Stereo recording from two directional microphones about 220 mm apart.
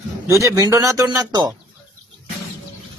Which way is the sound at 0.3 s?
15° right (ahead or behind).